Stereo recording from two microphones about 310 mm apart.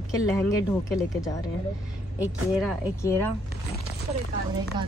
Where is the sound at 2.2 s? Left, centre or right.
Centre.